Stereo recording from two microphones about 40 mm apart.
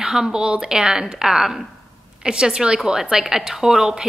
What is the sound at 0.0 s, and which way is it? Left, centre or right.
A woman's voice, centre.